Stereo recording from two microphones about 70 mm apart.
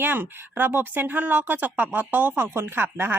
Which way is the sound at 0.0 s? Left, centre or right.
Right.